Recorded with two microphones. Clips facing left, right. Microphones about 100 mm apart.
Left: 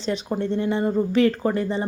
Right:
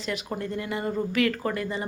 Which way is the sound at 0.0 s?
30° left (ahead or behind).